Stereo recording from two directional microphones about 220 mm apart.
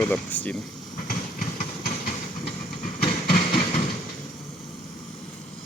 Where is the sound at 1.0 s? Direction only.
40° left (ahead or behind).